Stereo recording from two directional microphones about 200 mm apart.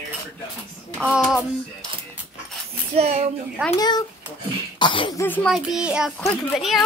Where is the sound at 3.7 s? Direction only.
20° left (ahead or behind).